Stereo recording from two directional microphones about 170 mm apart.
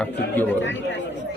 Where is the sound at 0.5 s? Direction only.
90° left.